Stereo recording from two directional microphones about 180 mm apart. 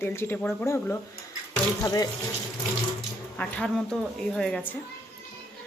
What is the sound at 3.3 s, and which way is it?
A woman's voice, 5° left (ahead or behind).